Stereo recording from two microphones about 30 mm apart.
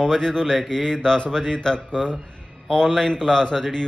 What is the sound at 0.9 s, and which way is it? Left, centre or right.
Speech, left.